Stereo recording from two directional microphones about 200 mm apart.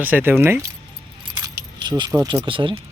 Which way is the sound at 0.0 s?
10° right (ahead or behind).